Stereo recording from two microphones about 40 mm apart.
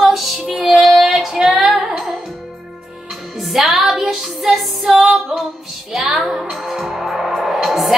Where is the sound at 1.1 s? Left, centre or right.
Centre.